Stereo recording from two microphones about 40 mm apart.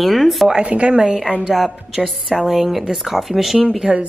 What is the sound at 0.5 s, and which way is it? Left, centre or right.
A woman's voice, right.